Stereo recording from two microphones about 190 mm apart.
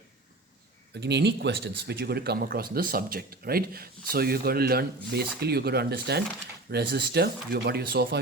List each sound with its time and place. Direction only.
0.9 s speech: 65° right (ahead or behind)